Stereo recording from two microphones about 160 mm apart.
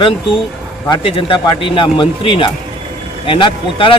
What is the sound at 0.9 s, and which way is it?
Speech, 35° left (ahead or behind).